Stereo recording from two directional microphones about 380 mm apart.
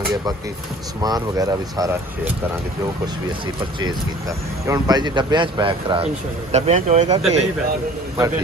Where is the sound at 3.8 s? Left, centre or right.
Centre.